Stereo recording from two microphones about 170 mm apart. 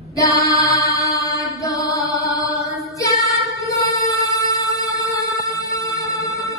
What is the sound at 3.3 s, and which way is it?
Music, 20° left (ahead or behind).